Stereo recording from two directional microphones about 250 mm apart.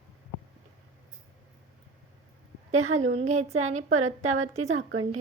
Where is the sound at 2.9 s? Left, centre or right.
Right.